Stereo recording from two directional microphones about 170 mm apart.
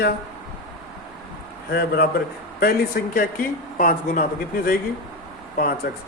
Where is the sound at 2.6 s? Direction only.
65° left (ahead or behind).